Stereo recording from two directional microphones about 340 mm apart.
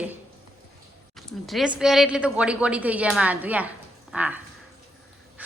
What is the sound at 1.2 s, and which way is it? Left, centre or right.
A woman's voice, centre.